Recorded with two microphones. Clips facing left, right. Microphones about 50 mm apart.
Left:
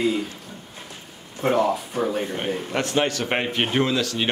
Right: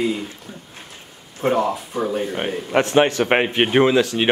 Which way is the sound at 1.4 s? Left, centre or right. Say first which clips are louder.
Right 1 dB; centre.